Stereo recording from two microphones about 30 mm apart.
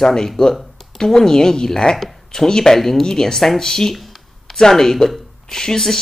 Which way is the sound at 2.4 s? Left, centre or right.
Centre.